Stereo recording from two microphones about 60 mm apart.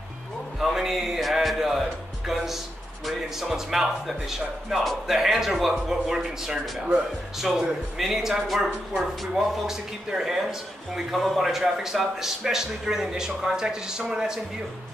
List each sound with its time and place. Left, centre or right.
0.6 s music: centre
3.1 s speech: centre
8.0 s a man's voice: centre